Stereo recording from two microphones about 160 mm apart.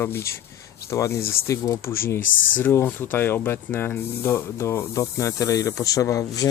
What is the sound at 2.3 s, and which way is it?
Speech, 60° left (ahead or behind).